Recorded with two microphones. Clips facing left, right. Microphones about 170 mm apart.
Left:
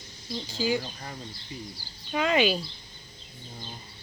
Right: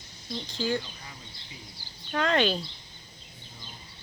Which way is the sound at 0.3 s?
5° left (ahead or behind).